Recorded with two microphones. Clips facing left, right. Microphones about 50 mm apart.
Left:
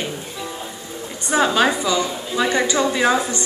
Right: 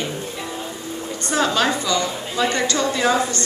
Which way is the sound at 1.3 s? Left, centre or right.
Centre.